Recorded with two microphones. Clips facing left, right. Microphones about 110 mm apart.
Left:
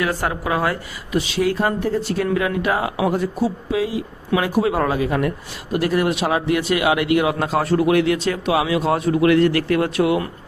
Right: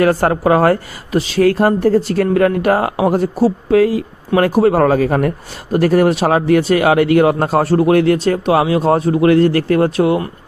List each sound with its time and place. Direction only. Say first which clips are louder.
0.0 s a man's voice: right 9 dB; 50° right (ahead or behind)